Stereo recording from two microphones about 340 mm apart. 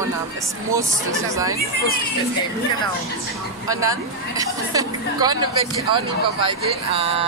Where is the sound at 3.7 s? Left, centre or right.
Centre.